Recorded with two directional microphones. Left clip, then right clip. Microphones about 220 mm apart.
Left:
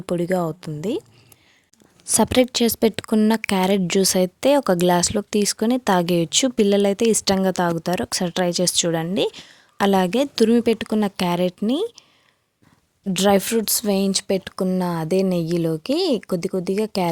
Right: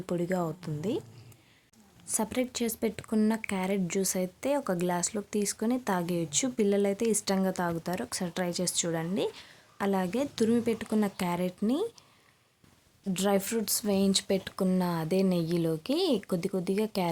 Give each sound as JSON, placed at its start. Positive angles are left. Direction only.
{"t": 0.0, "sound": "a woman's voice", "side_deg": 35}
{"t": 2.0, "sound": "a woman's voice", "side_deg": 40}
{"t": 13.1, "sound": "a woman's voice", "side_deg": 40}